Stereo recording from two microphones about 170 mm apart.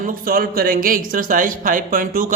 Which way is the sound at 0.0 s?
55° right (ahead or behind).